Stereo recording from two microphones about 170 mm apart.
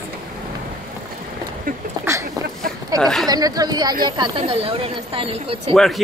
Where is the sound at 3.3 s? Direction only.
20° right (ahead or behind).